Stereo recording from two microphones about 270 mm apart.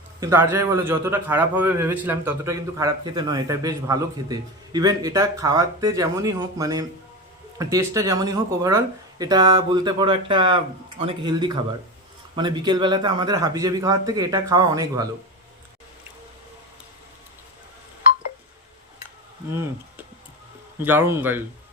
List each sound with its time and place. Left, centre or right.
0.2 s a man's voice: centre
19.5 s a man's voice: centre